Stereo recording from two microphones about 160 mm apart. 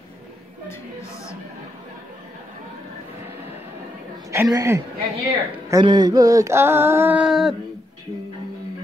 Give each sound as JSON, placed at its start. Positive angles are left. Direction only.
{"t": 4.3, "sound": "a woman's voice", "side_deg": -20}